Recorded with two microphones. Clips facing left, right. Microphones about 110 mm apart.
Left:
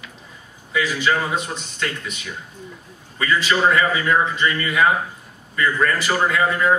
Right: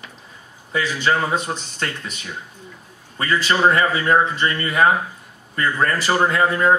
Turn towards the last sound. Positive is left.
turn(degrees=-40)  # may be behind; listen again after turning